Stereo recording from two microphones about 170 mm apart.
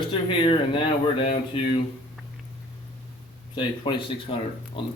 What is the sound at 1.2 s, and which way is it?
Speech, 30° left (ahead or behind).